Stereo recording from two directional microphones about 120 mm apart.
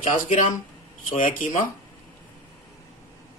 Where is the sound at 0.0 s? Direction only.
90° left.